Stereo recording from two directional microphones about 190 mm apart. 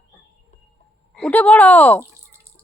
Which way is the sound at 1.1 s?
5° left (ahead or behind).